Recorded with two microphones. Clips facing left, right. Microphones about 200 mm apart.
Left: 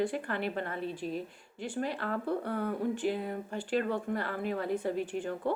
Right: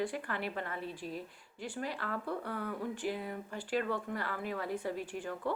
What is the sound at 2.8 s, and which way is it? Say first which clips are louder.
A woman's voice: left 5 dB; 25° left (ahead or behind).